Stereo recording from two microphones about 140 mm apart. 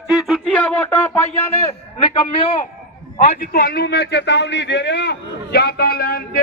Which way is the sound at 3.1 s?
80° left.